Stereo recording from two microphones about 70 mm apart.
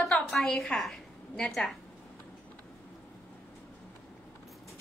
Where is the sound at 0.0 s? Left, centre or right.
Centre.